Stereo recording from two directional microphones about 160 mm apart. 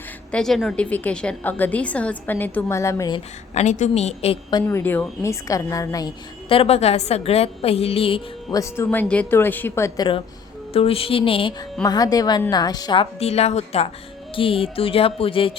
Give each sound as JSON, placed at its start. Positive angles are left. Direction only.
{"t": 0.3, "sound": "a woman's voice", "side_deg": 5}
{"t": 3.5, "sound": "a woman's voice", "side_deg": 50}
{"t": 4.5, "sound": "a woman's voice", "side_deg": 15}
{"t": 8.4, "sound": "a woman's voice", "side_deg": 20}
{"t": 10.7, "sound": "a woman's voice", "side_deg": 35}
{"t": 11.8, "sound": "a woman's voice", "side_deg": 25}